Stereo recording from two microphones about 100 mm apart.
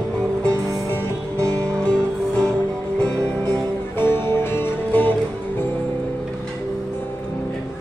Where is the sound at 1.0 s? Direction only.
30° right (ahead or behind).